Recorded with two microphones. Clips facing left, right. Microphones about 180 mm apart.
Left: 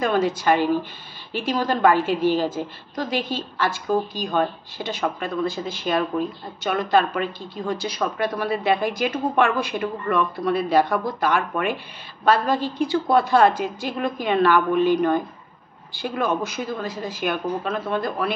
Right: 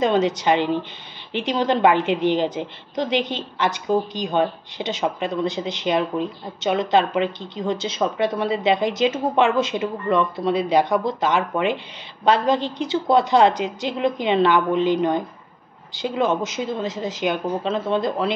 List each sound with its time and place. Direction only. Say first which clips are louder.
0.0 s a woman's voice: right 2 dB; 20° right (ahead or behind)